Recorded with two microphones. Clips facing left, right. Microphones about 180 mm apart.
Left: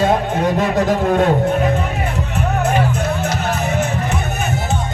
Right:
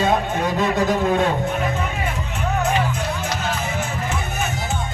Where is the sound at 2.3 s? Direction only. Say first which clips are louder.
Left 3 dB; 55° left (ahead or behind).